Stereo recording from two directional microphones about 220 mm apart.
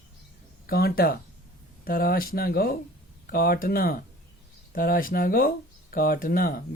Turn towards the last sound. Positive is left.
turn(degrees=40)  # may be behind; listen again after turning